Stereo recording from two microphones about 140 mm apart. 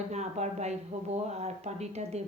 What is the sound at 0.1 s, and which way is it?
Speech, 55° right (ahead or behind).